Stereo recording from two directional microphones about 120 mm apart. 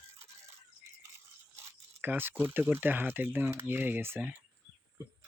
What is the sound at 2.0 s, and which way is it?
Speech, 15° right (ahead or behind).